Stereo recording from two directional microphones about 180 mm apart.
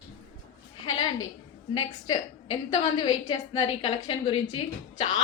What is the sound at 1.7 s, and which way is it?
A woman's voice, 25° left (ahead or behind).